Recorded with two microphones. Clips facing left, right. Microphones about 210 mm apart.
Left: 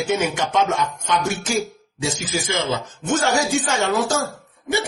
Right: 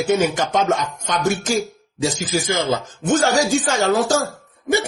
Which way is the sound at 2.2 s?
40° right (ahead or behind).